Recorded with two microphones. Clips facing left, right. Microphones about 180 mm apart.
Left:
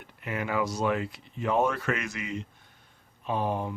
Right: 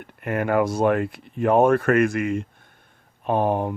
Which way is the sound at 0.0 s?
55° right (ahead or behind).